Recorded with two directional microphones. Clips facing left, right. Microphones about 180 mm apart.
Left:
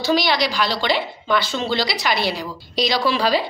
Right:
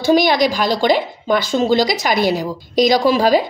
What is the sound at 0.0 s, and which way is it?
A woman's voice, 50° right (ahead or behind).